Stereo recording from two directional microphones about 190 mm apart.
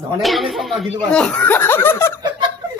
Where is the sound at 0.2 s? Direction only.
Centre (ahead or behind).